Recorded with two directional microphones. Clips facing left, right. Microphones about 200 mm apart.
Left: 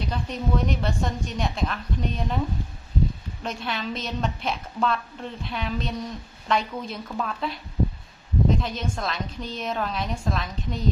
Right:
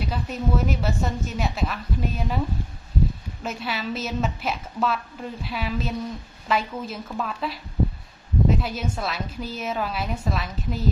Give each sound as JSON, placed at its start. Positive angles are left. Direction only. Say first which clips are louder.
{"t": 0.0, "sound": "a woman's voice", "louder": "right 1 dB", "side_deg": -5}
{"t": 3.4, "sound": "a woman's voice", "louder": "right 1 dB", "side_deg": -5}